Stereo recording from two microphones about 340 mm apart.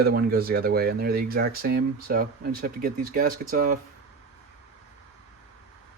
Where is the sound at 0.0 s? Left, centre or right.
Right.